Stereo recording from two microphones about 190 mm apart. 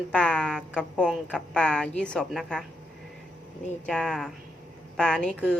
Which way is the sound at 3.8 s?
5° left (ahead or behind).